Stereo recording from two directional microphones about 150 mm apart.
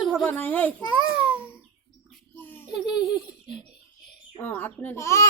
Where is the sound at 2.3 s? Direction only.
15° left (ahead or behind).